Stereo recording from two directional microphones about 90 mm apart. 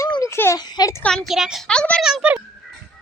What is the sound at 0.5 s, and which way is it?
Speech, 50° left (ahead or behind).